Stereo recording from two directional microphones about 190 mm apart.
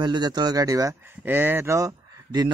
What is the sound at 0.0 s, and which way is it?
Speech, 20° right (ahead or behind).